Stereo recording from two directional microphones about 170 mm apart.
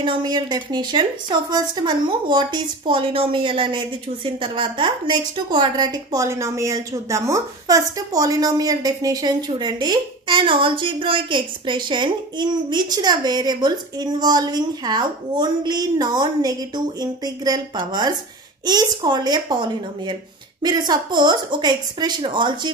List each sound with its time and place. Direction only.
0.0 s a woman's voice: 25° right (ahead or behind)